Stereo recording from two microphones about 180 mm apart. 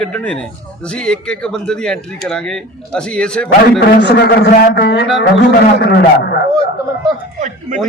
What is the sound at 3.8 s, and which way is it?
Speech, 65° left (ahead or behind).